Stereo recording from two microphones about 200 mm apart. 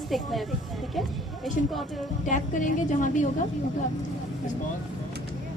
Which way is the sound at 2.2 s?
40° left (ahead or behind).